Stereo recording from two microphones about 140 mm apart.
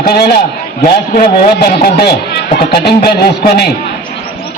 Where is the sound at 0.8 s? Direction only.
90° left.